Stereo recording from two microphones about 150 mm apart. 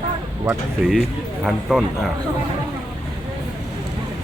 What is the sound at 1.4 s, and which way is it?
Speech, centre (ahead or behind).